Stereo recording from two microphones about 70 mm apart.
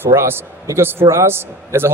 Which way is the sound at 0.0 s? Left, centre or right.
Right.